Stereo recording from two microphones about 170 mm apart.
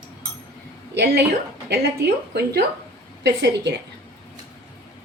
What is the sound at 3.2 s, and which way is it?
Speech, 90° right.